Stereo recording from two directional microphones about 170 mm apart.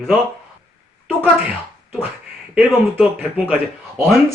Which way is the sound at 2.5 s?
5° right (ahead or behind).